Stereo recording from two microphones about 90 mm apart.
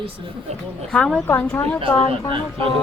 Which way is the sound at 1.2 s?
20° left (ahead or behind).